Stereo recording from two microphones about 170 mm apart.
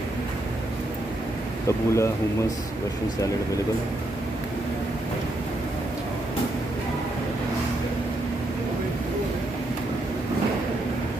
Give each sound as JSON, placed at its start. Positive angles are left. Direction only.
{"t": 1.7, "sound": "speech", "side_deg": 15}